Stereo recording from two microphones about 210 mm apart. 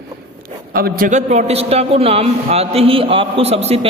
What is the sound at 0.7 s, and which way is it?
A man's voice, 45° right (ahead or behind).